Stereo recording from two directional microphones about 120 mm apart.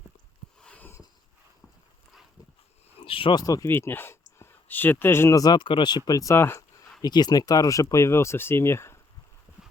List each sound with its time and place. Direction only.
0.6 s a sound: 10° left (ahead or behind)
3.1 s speech: 45° left (ahead or behind)
3.4 s speech: 30° left (ahead or behind)
3.7 s speech: 20° left (ahead or behind)
5.4 s speech: 35° left (ahead or behind)
6.1 s speech: 30° left (ahead or behind)
7.0 s speech: 35° left (ahead or behind)